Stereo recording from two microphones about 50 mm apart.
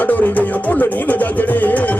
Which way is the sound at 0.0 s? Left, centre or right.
Left.